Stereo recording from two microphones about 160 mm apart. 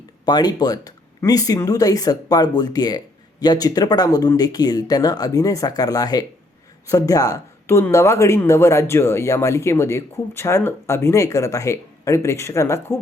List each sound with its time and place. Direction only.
0.3 s speech: 25° left (ahead or behind)